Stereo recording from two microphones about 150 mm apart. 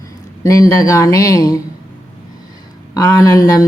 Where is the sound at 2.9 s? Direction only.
20° left (ahead or behind).